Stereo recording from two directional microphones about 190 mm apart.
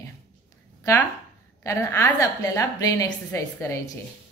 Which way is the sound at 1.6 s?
15° left (ahead or behind).